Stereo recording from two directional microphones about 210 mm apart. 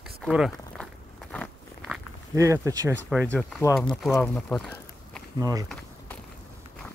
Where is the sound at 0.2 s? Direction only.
Centre (ahead or behind).